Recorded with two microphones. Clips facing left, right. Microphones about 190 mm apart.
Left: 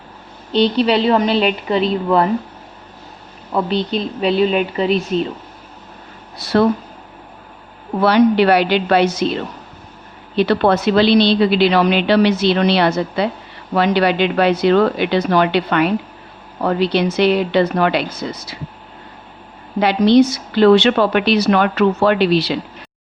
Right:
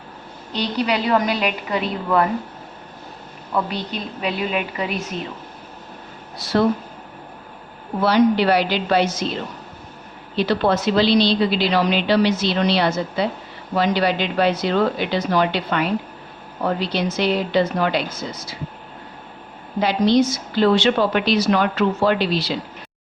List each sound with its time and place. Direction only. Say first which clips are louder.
0.5 s a woman's voice: left 7 dB; 30° left (ahead or behind)
3.5 s a woman's voice: left 6 dB; 30° left (ahead or behind)
6.4 s a woman's voice: left 4 dB; 65° left (ahead or behind)
8.0 s a woman's voice: left 4 dB; 65° left (ahead or behind)
19.8 s a woman's voice: left 5 dB; 65° left (ahead or behind)